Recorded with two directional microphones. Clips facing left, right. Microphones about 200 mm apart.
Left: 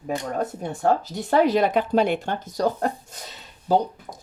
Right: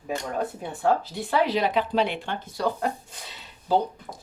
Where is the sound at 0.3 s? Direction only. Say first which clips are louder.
Left 2 dB; 45° left (ahead or behind).